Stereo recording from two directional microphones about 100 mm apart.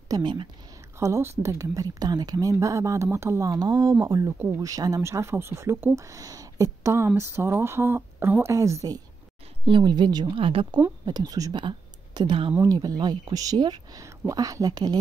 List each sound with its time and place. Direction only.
0.1 s speech: 50° right (ahead or behind)
0.9 s speech: 30° right (ahead or behind)
9.7 s speech: 50° right (ahead or behind)
10.3 s speech: 65° right (ahead or behind)
11.1 s speech: 40° right (ahead or behind)
11.6 s a sound: 50° right (ahead or behind)
12.5 s speech: 40° right (ahead or behind)